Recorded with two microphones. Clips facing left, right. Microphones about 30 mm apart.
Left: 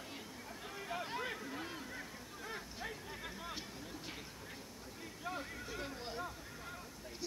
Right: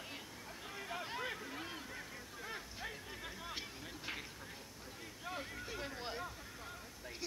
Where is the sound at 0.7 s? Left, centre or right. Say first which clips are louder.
Left 2 dB; centre.